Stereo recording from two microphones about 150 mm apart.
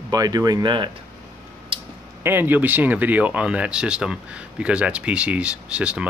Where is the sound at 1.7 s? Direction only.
35° right (ahead or behind).